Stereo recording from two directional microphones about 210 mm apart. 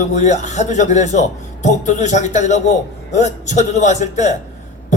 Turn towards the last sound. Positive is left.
turn(degrees=35)  # may be behind; listen again after turning